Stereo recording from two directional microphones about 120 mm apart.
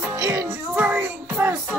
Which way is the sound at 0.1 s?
25° right (ahead or behind).